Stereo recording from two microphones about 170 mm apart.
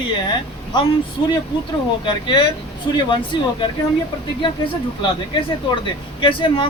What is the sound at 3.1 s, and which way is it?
Speech, 30° left (ahead or behind).